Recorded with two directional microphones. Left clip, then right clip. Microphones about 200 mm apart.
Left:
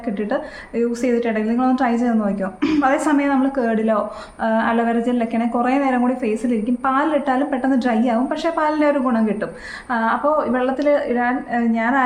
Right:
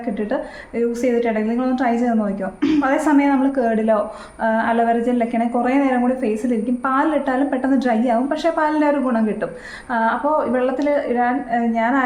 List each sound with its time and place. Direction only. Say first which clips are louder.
0.8 s a woman's voice: right 1 dB; 5° left (ahead or behind)